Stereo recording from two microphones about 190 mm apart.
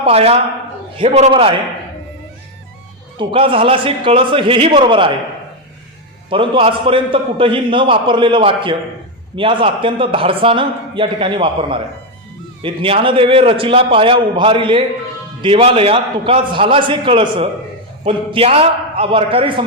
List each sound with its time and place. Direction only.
0.0 s a woman's voice: 30° right (ahead or behind)
3.2 s a man's voice: 25° right (ahead or behind)
6.3 s a man's voice: 25° right (ahead or behind)